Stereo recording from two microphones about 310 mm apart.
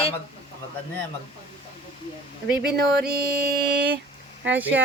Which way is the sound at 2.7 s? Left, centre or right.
Right.